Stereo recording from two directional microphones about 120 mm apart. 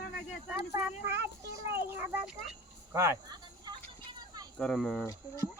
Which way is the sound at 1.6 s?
20° right (ahead or behind).